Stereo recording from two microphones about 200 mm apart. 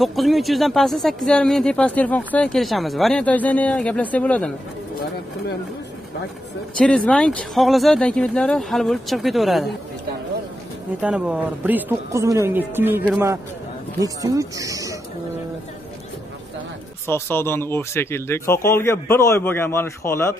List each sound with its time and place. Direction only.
0.0 s speech: centre (ahead or behind)
7.1 s speech: 5° left (ahead or behind)
11.0 s speech: 5° right (ahead or behind)
17.1 s speech: 10° left (ahead or behind)